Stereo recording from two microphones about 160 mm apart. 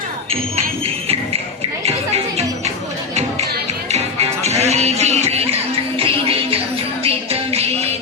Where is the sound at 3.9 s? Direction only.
40° right (ahead or behind).